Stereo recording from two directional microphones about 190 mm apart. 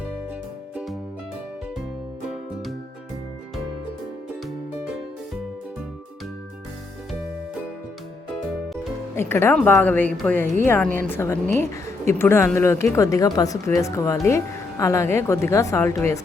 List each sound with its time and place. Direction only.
9.1 s a woman's voice: 10° left (ahead or behind)
10.4 s speech: 40° right (ahead or behind)
10.9 s a woman's voice: 10° left (ahead or behind)